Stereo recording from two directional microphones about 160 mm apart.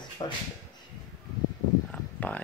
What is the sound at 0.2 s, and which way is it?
Speech, 35° left (ahead or behind).